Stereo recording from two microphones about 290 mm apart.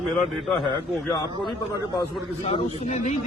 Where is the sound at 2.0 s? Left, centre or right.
Centre.